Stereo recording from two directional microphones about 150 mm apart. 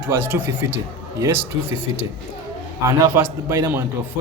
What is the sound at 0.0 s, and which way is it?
Speech, 10° right (ahead or behind).